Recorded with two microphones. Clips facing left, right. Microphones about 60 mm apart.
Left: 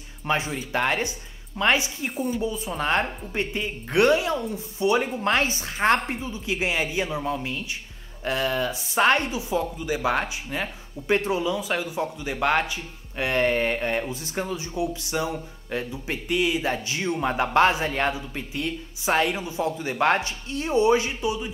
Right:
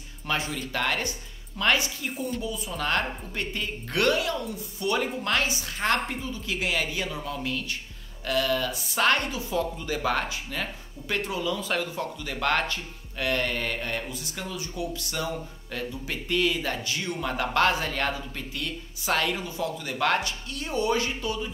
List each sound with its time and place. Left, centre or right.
0.3 s speech: left
13.2 s speech: left